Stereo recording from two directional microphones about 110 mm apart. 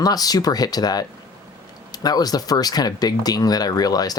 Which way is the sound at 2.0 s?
35° left (ahead or behind).